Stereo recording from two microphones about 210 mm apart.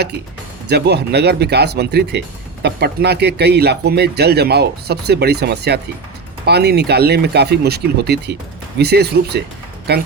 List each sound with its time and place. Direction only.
0.7 s speech: 50° right (ahead or behind)